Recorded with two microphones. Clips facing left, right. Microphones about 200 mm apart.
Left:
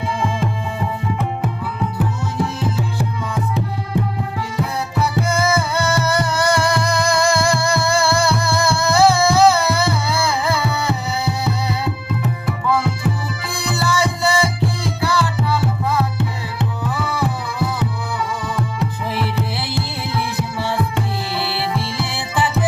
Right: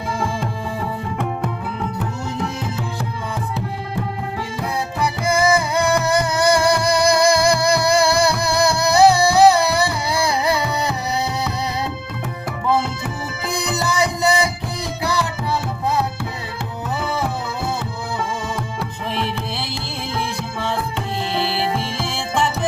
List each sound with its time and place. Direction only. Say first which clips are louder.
4.9 s music: left 1 dB; 15° right (ahead or behind)
12.6 s music: left 1 dB; 25° right (ahead or behind)
19.1 s music: left 2 dB; 5° left (ahead or behind)
21.3 s music: right 2 dB; 30° right (ahead or behind)
22.0 s music: right 1 dB; 5° left (ahead or behind)